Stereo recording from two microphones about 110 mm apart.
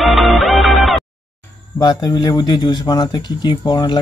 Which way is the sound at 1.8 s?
40° left (ahead or behind).